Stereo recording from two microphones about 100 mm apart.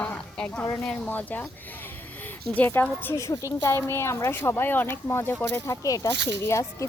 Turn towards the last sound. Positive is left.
turn(degrees=30)  # may be behind; listen again after turning